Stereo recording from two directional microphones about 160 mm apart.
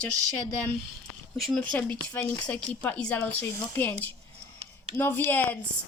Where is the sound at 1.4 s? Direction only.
Centre (ahead or behind).